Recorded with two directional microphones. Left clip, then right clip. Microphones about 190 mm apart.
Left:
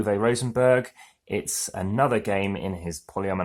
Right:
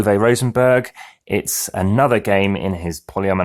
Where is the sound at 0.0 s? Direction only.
40° right (ahead or behind).